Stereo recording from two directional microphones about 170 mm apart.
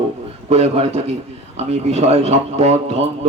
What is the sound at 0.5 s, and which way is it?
A man's voice, 40° right (ahead or behind).